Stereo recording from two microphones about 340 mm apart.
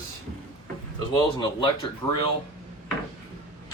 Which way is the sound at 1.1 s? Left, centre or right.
Centre.